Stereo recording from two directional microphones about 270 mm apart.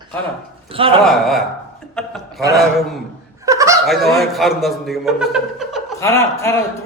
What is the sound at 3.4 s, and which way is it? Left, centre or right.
Snicker, centre.